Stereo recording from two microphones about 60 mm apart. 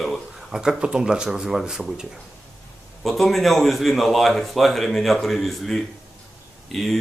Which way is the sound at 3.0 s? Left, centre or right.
Centre.